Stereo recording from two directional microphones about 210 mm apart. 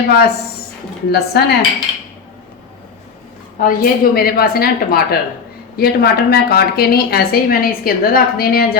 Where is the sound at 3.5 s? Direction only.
45° left (ahead or behind).